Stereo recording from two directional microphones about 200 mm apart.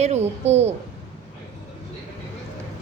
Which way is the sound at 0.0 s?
35° right (ahead or behind).